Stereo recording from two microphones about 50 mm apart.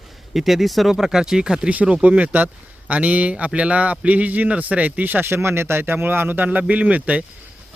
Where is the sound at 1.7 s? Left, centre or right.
Right.